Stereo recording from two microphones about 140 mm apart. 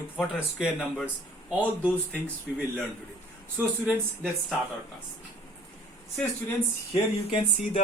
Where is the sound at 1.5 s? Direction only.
10° right (ahead or behind).